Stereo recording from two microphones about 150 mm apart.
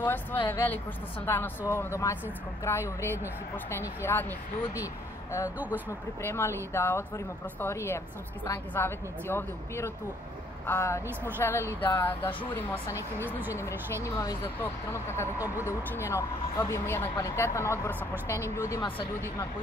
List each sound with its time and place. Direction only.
0.0 s speech: 10° left (ahead or behind)
6.2 s speech: 15° left (ahead or behind)
15.3 s speech: 10° right (ahead or behind)
15.6 s speech: 15° left (ahead or behind)
18.8 s speech: 35° left (ahead or behind)